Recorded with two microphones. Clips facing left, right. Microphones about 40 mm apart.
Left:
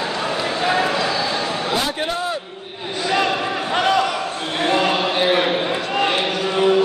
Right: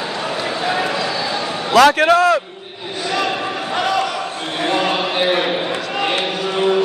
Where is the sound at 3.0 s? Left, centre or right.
Centre.